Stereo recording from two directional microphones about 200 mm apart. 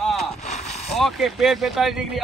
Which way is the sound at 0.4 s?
35° left (ahead or behind).